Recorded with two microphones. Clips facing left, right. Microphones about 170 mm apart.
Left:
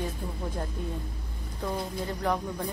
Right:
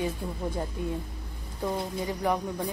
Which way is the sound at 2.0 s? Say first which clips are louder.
Right 1 dB; 10° right (ahead or behind).